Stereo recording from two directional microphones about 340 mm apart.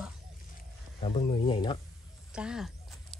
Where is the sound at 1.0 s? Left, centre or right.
Centre.